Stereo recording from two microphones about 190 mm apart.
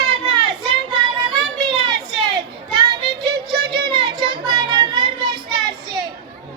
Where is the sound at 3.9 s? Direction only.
25° right (ahead or behind).